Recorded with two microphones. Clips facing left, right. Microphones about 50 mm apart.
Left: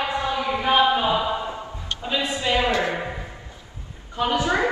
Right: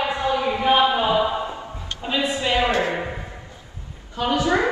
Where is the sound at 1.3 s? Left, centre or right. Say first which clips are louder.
Even; right.